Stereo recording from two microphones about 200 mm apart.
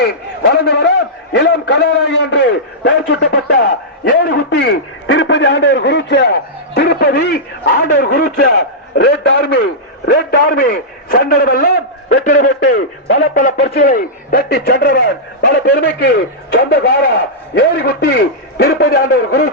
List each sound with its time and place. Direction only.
0.0 s a man's voice: 55° left (ahead or behind); by 12.5 s 40° left (ahead or behind)
12.7 s a man's voice: 60° left (ahead or behind)
13.3 s speech: 45° left (ahead or behind)